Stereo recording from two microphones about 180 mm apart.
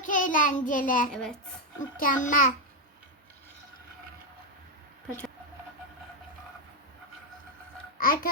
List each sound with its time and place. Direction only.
0.0 s child singing: 45° left (ahead or behind)
1.1 s a child's voice: 5° left (ahead or behind)
2.0 s a child's voice: 45° left (ahead or behind)
7.9 s a child's voice: 55° left (ahead or behind)